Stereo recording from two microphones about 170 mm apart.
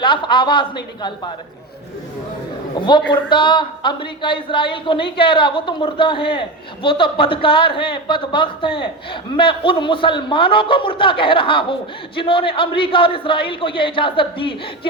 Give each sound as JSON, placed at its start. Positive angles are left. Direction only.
{"t": 0.0, "sound": "speech", "side_deg": 30}
{"t": 3.1, "sound": "a man's voice", "side_deg": 25}